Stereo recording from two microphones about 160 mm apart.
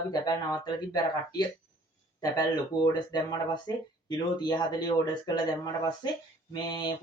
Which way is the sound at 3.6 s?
25° left (ahead or behind).